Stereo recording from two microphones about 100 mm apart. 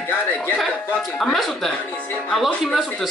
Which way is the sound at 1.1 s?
5° left (ahead or behind).